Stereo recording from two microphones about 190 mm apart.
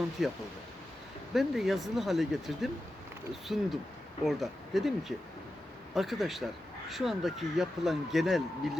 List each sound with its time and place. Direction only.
0.2 s speech: centre (ahead or behind)